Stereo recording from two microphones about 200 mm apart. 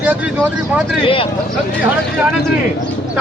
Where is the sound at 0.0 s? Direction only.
5° right (ahead or behind).